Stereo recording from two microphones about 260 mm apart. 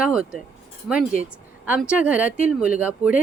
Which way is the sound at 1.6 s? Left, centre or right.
Centre.